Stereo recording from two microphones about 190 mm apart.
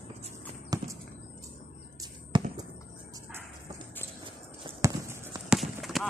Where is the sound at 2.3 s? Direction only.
25° right (ahead or behind).